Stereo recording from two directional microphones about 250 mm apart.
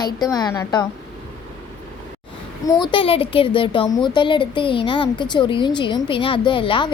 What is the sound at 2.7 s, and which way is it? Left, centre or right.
A woman's voice, centre.